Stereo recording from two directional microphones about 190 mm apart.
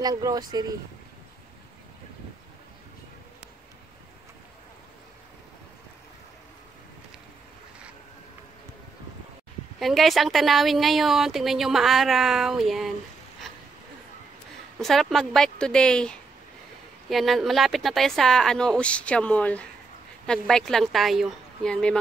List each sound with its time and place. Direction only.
0.0 s speech: 20° right (ahead or behind)
9.8 s speech: centre (ahead or behind)
14.8 s speech: centre (ahead or behind)